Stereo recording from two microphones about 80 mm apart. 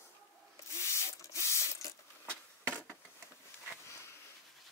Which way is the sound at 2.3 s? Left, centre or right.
Centre.